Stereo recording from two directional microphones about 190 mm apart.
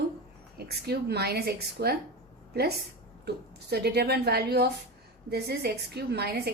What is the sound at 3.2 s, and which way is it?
A woman's voice, 60° right (ahead or behind).